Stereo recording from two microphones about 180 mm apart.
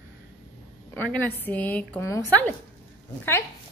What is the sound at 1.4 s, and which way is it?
A woman's voice, 10° left (ahead or behind).